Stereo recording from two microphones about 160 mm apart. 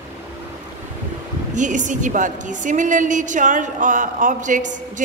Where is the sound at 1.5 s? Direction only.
50° right (ahead or behind).